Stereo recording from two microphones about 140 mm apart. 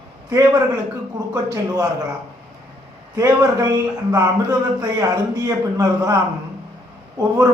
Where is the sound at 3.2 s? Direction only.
25° right (ahead or behind).